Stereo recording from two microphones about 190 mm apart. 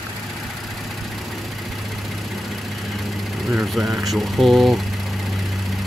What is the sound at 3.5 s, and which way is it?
Speech, centre (ahead or behind).